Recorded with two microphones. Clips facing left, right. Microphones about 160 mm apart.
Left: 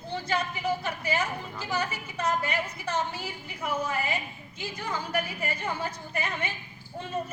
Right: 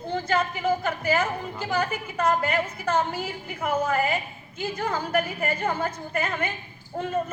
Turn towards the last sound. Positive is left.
turn(degrees=-50)  # may be behind; listen again after turning